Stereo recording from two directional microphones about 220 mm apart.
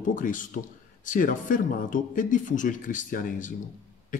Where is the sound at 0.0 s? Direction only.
35° left (ahead or behind).